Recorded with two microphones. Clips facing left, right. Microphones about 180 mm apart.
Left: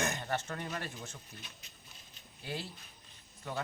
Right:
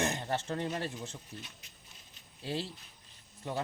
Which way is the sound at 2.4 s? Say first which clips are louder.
Right 4 dB; 30° right (ahead or behind).